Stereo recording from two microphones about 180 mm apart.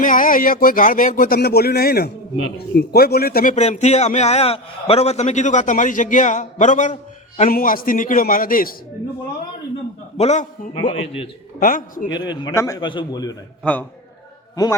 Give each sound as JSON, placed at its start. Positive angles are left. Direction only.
{"t": 0.0, "sound": "a man's voice", "side_deg": 50}
{"t": 3.5, "sound": "a man's voice", "side_deg": 40}
{"t": 10.2, "sound": "a man's voice", "side_deg": 40}
{"t": 11.6, "sound": "a man's voice", "side_deg": 50}
{"t": 12.1, "sound": "a man's voice", "side_deg": 25}
{"t": 14.5, "sound": "a man's voice", "side_deg": 20}